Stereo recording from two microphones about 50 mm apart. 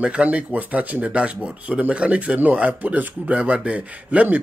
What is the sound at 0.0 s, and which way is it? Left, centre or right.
A man's voice, right.